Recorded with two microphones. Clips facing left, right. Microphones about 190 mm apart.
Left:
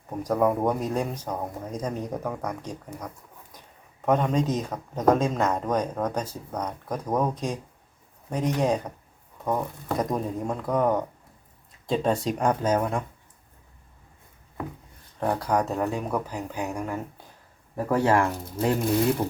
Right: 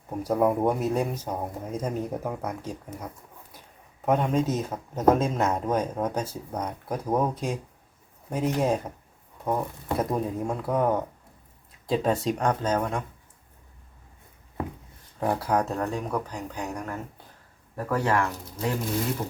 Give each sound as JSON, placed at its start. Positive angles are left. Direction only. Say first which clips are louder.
{"t": 0.2, "sound": "speech", "louder": "even", "side_deg": -5}
{"t": 3.5, "sound": "a sound", "louder": "even", "side_deg": -5}
{"t": 4.0, "sound": "speech", "louder": "left 1 dB", "side_deg": -5}
{"t": 15.2, "sound": "speech", "louder": "even", "side_deg": 0}
{"t": 17.7, "sound": "speech", "louder": "left 3 dB", "side_deg": 25}